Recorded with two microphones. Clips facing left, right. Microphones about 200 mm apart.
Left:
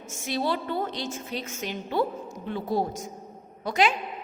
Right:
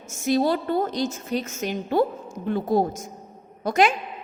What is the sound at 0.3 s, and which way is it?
A woman's voice, 45° right (ahead or behind).